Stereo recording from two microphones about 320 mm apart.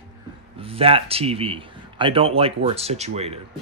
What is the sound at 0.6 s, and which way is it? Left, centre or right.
Speech, centre.